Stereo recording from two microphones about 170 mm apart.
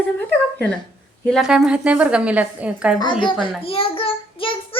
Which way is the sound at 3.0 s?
25° left (ahead or behind).